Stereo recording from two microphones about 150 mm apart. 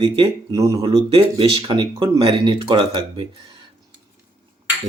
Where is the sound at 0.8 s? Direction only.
40° right (ahead or behind).